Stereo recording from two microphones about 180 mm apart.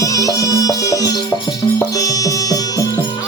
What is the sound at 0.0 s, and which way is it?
Music, 20° left (ahead or behind).